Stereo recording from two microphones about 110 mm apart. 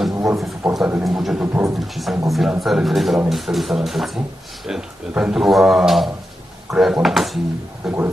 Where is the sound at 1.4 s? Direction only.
20° right (ahead or behind).